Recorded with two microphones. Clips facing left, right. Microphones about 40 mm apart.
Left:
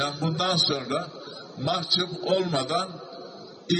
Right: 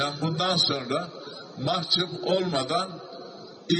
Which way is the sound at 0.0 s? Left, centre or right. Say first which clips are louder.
Even; centre.